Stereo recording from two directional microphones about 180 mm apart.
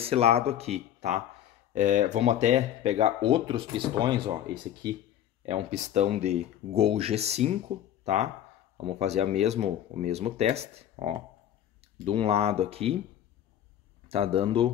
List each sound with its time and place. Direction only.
0.0 s speech: 35° right (ahead or behind)
5.4 s speech: 35° right (ahead or behind)
14.0 s speech: 35° right (ahead or behind)